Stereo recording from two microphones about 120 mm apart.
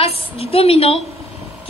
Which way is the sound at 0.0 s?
55° left (ahead or behind).